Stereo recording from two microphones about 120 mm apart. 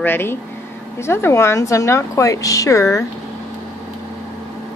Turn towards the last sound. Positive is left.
turn(degrees=25)  # may be behind; listen again after turning